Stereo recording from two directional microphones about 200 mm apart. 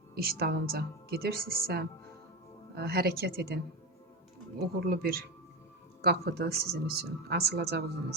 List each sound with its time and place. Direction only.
0.1 s a woman's voice: 50° right (ahead or behind)
4.9 s a woman's voice: 50° right (ahead or behind)